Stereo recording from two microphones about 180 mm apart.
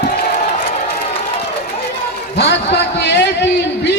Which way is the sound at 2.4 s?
70° left (ahead or behind).